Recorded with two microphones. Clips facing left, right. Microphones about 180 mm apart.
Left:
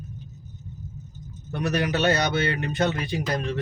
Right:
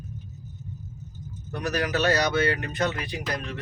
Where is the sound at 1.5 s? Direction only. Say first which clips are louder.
Left 2 dB; 25° left (ahead or behind).